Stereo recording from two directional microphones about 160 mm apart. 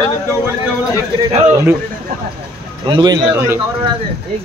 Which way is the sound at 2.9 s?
25° right (ahead or behind).